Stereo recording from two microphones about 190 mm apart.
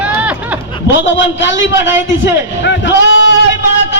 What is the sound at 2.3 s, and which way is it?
Sheep, 70° left (ahead or behind).